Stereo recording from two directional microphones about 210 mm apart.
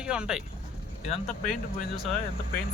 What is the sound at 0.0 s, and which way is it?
Speech, 5° right (ahead or behind).